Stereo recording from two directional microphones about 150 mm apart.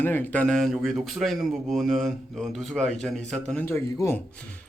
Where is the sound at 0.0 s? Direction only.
15° left (ahead or behind).